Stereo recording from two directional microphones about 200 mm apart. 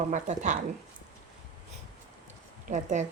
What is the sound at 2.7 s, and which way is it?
Speech, 40° right (ahead or behind).